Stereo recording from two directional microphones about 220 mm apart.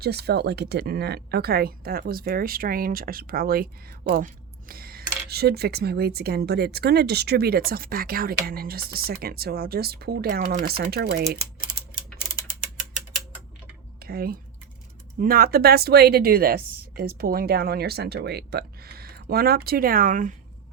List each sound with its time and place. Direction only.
0.0 s a woman's voice: 45° right (ahead or behind)
14.0 s a woman's voice: 45° right (ahead or behind)